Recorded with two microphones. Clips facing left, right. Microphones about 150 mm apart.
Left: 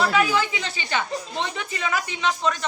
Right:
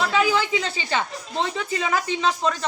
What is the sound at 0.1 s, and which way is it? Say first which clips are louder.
Speech: right 1 dB; 30° right (ahead or behind).